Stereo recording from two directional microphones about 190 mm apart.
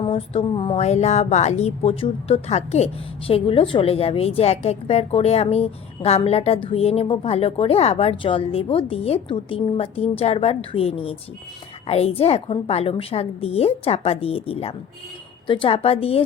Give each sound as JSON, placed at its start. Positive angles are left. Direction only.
{"t": 0.0, "sound": "speech", "side_deg": 30}